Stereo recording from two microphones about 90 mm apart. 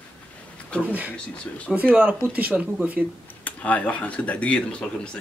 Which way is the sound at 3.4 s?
15° left (ahead or behind).